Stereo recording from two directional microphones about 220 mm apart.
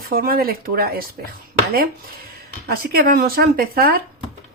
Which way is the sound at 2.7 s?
45° right (ahead or behind).